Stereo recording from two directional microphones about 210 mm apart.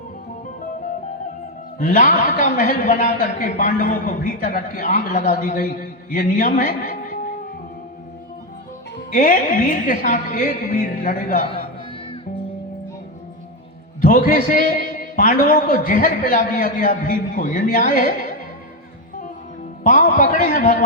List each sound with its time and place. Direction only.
1.8 s a man's voice: 40° left (ahead or behind)
9.0 s a man's voice: 40° left (ahead or behind)
14.0 s a man's voice: 40° left (ahead or behind)
19.8 s a man's voice: 40° left (ahead or behind)